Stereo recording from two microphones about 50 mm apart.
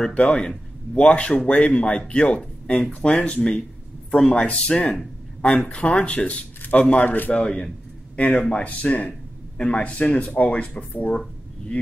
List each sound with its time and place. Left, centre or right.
0.1 s a man's voice: left
4.6 s speech: left
7.3 s a man's voice: centre
8.2 s speech: left